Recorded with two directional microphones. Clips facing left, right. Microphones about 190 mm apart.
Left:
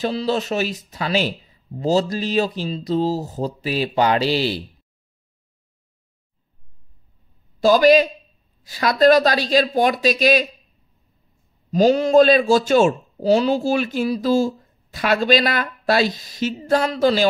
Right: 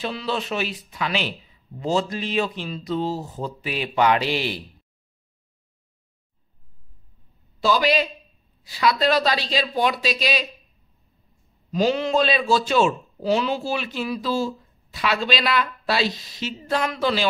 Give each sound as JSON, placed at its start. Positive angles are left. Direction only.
{"t": 0.0, "sound": "speech", "side_deg": 40}
{"t": 7.6, "sound": "a man's voice", "side_deg": 45}
{"t": 11.7, "sound": "a man's voice", "side_deg": 40}